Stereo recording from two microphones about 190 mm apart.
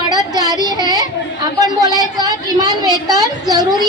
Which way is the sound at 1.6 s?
20° right (ahead or behind).